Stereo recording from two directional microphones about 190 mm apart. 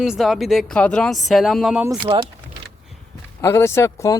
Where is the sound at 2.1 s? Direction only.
25° right (ahead or behind).